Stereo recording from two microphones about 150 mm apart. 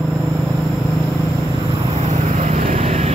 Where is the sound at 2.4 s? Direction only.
55° right (ahead or behind).